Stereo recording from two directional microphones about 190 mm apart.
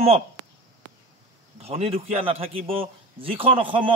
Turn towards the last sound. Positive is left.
turn(degrees=-25)  # may be behind; listen again after turning